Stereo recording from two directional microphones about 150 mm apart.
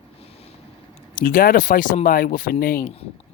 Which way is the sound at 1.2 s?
70° left (ahead or behind).